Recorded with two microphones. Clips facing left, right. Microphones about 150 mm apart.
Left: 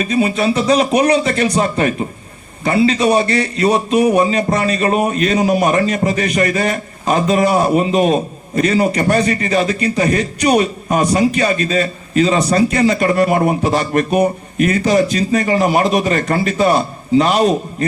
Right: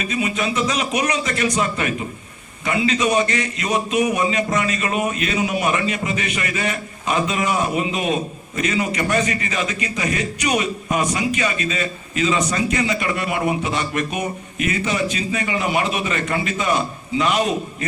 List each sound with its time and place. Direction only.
0.0 s speech: 35° left (ahead or behind)